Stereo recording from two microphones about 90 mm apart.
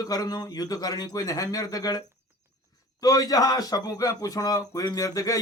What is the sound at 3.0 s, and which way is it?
A man's voice, 45° left (ahead or behind).